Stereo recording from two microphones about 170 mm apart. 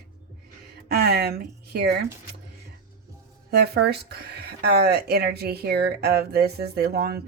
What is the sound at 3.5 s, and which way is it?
Speech, 70° right (ahead or behind).